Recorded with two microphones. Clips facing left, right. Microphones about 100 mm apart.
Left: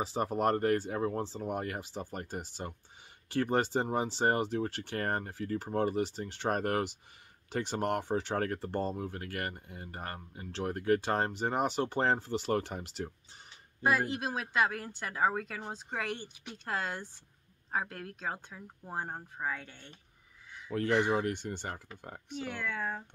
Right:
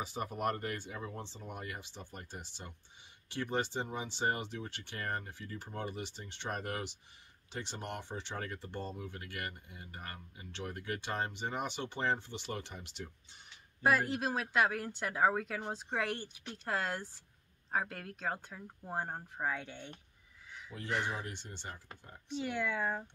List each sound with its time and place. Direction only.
0.0 s speech: 30° left (ahead or behind)
13.8 s speech: centre (ahead or behind)
20.7 s speech: 65° left (ahead or behind)
22.4 s speech: 10° right (ahead or behind)